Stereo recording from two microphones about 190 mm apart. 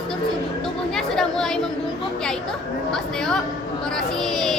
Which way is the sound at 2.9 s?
5° left (ahead or behind).